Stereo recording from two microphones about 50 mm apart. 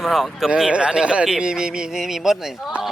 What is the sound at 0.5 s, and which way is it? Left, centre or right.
A man's voice, centre.